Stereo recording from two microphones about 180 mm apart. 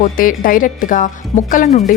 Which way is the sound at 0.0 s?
50° left (ahead or behind).